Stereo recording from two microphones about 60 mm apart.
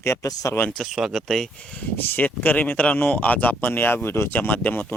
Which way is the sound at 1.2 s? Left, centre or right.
Centre.